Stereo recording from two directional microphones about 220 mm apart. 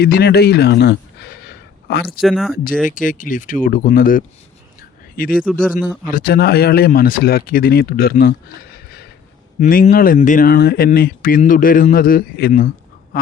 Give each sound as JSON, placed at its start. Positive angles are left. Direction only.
{"t": 0.0, "sound": "speech", "side_deg": 45}
{"t": 2.2, "sound": "speech", "side_deg": 0}
{"t": 2.8, "sound": "speech", "side_deg": 35}